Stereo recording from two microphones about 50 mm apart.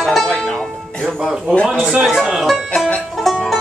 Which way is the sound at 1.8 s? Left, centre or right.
Centre.